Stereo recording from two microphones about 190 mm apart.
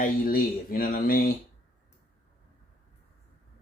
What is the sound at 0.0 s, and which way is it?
Speech, 50° left (ahead or behind).